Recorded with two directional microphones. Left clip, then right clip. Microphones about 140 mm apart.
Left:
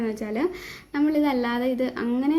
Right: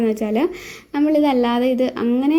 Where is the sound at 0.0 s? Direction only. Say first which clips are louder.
Right 7 dB; 25° right (ahead or behind).